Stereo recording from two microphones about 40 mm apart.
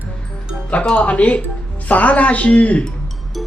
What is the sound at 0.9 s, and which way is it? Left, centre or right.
Speech, left.